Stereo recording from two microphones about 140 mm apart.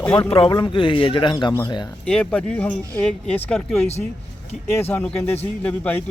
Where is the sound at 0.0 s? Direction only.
15° left (ahead or behind).